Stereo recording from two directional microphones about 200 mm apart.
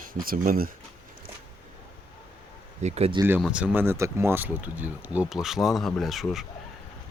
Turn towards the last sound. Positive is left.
turn(degrees=0)  # may be behind; listen again after turning